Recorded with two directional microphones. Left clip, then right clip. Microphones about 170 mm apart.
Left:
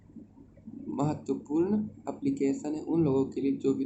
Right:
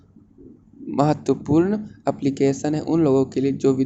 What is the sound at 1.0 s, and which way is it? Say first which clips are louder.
Speech: right 12 dB; 45° right (ahead or behind).